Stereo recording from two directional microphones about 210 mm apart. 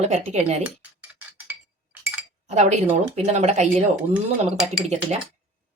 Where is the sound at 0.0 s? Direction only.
30° right (ahead or behind).